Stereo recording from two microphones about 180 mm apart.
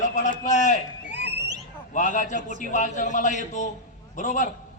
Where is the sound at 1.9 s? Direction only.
45° left (ahead or behind).